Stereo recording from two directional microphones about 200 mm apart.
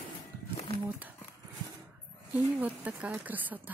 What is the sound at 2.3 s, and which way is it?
Speech, 10° right (ahead or behind).